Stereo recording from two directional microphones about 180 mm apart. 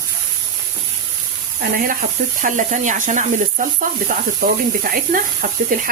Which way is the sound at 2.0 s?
45° right (ahead or behind).